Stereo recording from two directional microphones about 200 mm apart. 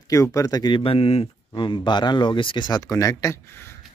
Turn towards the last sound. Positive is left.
turn(degrees=15)  # may be behind; listen again after turning